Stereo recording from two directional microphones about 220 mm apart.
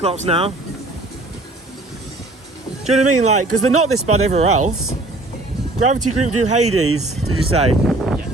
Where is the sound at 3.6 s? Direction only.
80° right.